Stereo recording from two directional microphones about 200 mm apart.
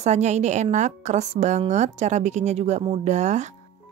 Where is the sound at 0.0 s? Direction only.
35° right (ahead or behind).